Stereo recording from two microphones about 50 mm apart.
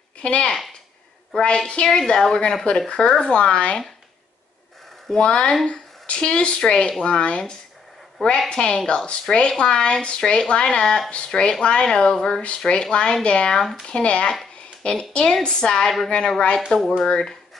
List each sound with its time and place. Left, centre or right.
0.2 s speech: left
1.9 s speech: centre
5.1 s speech: centre
13.6 s speech: centre
13.8 s speech: left